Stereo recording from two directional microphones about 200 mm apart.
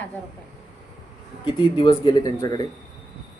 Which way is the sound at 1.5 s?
20° left (ahead or behind).